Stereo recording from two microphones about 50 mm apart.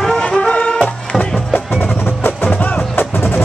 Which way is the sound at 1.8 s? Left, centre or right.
Left.